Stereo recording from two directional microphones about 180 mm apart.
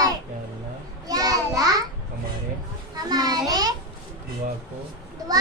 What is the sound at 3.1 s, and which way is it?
Speech, 20° right (ahead or behind).